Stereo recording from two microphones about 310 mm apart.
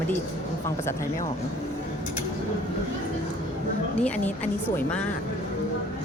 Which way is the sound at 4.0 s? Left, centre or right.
Centre.